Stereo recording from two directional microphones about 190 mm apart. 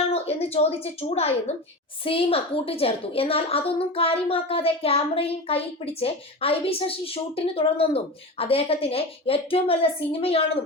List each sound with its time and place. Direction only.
0.1 s a woman's voice: 30° left (ahead or behind)